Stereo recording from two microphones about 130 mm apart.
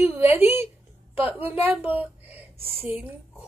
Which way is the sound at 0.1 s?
15° right (ahead or behind).